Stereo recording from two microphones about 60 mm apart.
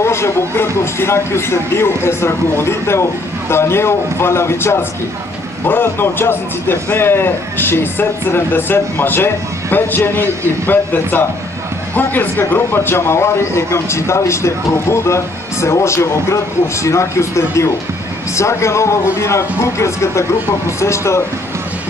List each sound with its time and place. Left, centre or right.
0.0 s a man's voice: left